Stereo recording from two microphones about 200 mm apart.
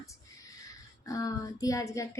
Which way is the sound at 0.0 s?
15° left (ahead or behind).